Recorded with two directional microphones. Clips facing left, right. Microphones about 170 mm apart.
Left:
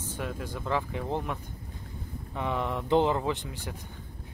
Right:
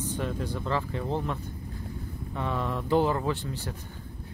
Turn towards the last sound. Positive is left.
turn(degrees=15)  # may be behind; listen again after turning